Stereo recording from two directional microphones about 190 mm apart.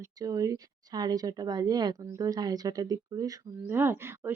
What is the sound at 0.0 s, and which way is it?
Speech, 20° right (ahead or behind).